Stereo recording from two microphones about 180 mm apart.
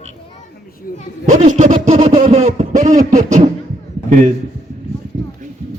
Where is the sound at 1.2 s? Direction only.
45° right (ahead or behind).